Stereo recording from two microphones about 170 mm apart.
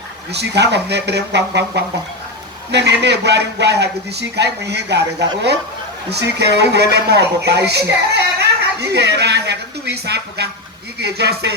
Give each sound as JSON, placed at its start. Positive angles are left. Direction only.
{"t": 0.3, "sound": "a man's voice", "side_deg": -80}
{"t": 6.1, "sound": "a man's voice", "side_deg": -75}
{"t": 8.4, "sound": "a sound", "side_deg": -80}
{"t": 11.0, "sound": "speech", "side_deg": -75}